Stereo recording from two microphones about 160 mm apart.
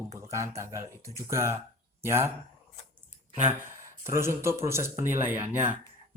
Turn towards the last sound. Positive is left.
turn(degrees=-15)  # may be behind; listen again after turning